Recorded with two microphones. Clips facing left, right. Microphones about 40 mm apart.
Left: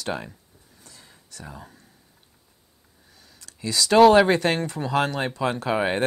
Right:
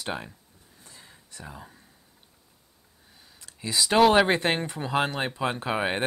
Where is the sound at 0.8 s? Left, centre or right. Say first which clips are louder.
Even; right.